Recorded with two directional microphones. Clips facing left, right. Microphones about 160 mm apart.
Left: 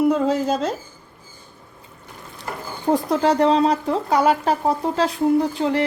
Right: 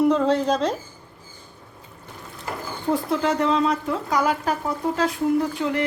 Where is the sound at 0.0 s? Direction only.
5° left (ahead or behind).